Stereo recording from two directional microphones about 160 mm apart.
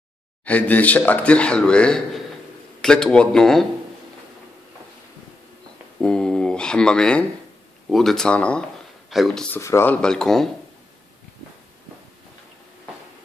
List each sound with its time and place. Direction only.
0.5 s speech: 10° left (ahead or behind)
5.9 s speech: 5° left (ahead or behind)
9.6 s speech: 15° left (ahead or behind)
10.0 s speech: 5° left (ahead or behind)